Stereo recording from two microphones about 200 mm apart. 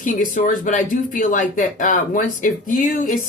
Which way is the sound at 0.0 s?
40° left (ahead or behind).